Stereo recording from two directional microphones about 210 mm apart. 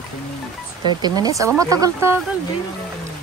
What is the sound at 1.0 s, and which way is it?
A man's voice, 20° right (ahead or behind).